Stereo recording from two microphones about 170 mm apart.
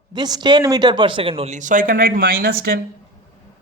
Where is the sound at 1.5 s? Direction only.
50° right (ahead or behind).